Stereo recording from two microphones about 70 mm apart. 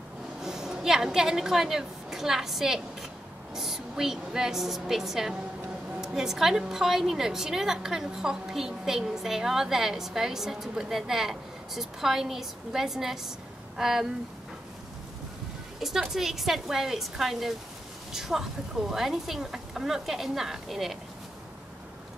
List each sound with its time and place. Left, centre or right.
0.4 s a woman's voice: centre
15.8 s a woman's voice: centre